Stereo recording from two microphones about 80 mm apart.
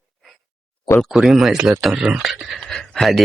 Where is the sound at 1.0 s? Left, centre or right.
Centre.